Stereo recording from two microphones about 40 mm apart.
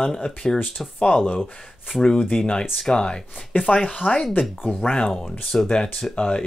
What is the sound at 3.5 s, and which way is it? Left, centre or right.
Speech, left.